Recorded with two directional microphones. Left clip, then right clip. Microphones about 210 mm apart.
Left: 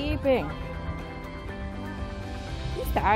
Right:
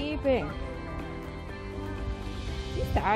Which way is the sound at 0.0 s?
20° left (ahead or behind).